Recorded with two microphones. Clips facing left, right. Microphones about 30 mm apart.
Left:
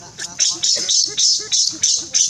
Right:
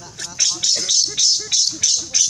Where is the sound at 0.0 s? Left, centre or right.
Centre.